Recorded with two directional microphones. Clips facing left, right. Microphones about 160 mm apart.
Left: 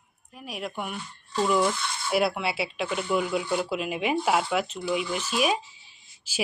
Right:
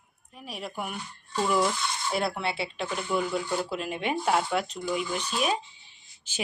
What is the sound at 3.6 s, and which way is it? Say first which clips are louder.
Speech: left 3 dB; 5° left (ahead or behind).